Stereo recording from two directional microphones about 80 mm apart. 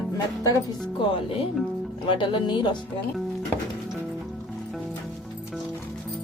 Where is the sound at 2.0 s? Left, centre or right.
Left.